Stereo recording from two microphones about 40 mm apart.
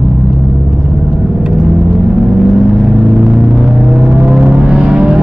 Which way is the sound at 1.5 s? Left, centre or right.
Centre.